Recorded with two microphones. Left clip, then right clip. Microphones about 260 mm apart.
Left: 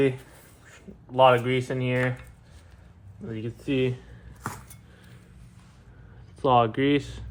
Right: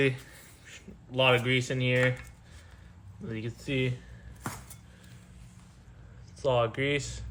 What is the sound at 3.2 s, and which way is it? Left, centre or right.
Speech, centre.